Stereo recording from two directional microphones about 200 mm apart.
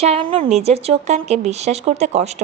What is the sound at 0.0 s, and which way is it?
A woman's voice, 30° right (ahead or behind).